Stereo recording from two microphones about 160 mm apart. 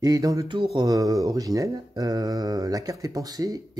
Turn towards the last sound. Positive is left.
turn(degrees=-20)  # may be behind; listen again after turning